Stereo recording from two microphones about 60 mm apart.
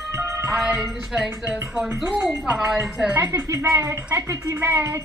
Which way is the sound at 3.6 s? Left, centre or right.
Right.